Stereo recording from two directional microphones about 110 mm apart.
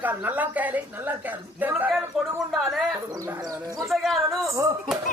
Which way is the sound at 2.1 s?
Centre (ahead or behind).